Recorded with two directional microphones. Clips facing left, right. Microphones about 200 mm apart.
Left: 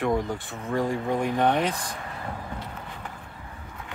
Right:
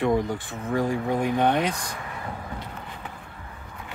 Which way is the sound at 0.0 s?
Centre (ahead or behind).